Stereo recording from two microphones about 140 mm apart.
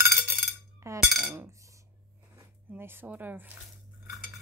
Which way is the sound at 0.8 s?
20° right (ahead or behind).